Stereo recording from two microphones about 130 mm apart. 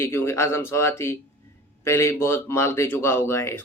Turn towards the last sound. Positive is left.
turn(degrees=20)  # may be behind; listen again after turning